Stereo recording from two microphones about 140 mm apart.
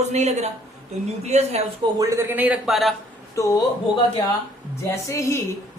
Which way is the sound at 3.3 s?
25° left (ahead or behind).